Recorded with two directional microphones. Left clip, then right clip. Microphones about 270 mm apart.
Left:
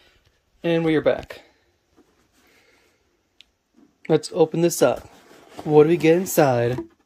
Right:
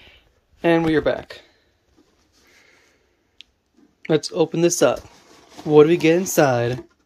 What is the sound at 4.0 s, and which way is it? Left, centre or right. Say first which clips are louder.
Speech: left 1 dB; centre.